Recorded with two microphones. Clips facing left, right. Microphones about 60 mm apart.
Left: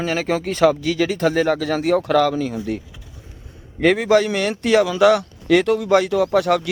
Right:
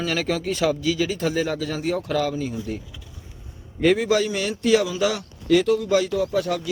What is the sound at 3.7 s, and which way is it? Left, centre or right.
A man's voice, left.